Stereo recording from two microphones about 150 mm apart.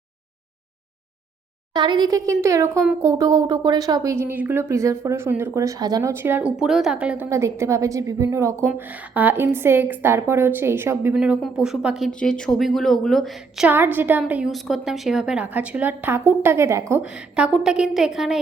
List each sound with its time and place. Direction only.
1.7 s a woman's voice: 30° right (ahead or behind); by 7.3 s 10° right (ahead or behind)
7.3 s a woman's voice: 20° right (ahead or behind)
11.1 s speech: 5° right (ahead or behind)
13.7 s a woman's voice: 15° right (ahead or behind)
17.0 s speech: 5° right (ahead or behind)